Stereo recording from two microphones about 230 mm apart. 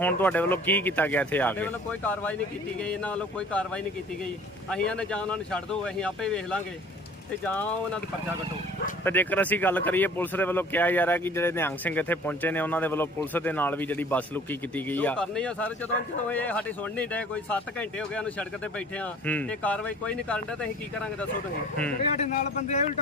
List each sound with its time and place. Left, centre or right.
0.2 s speech: centre
4.7 s speech: centre
9.0 s speech: centre
22.0 s a man's voice: left